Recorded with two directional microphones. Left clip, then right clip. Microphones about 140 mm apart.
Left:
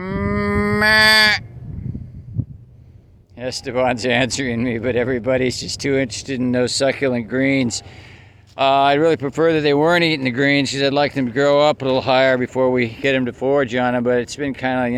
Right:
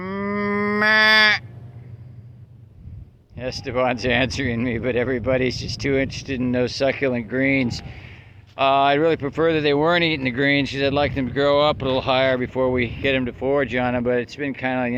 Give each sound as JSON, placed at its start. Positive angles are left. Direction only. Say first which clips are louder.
{"t": 0.0, "sound": "livestock", "louder": "left 3 dB", "side_deg": 25}
{"t": 3.3, "sound": "speech", "louder": "left 2 dB", "side_deg": 25}